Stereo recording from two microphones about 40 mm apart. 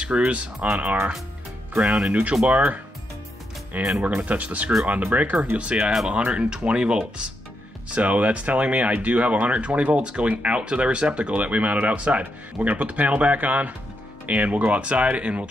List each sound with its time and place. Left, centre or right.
0.2 s speech: right
4.0 s speech: right